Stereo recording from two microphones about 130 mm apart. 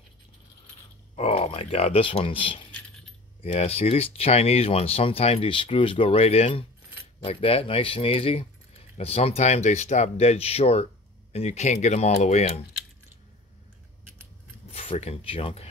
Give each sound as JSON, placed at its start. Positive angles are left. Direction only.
{"t": 1.1, "sound": "speech", "side_deg": 55}
{"t": 14.7, "sound": "speech", "side_deg": 50}